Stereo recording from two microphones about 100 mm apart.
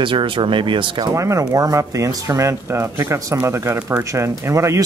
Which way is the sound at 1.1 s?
30° right (ahead or behind).